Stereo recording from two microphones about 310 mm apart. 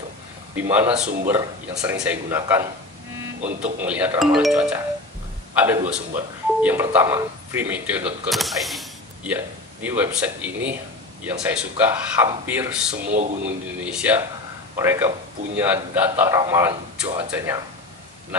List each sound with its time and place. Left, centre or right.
0.6 s speech: centre
3.3 s speech: right
3.8 s a man's voice: centre